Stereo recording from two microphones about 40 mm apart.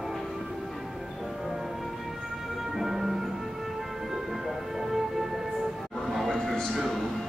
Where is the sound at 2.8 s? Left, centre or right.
Centre.